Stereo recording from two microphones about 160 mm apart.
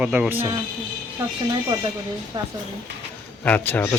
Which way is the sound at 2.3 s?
25° right (ahead or behind).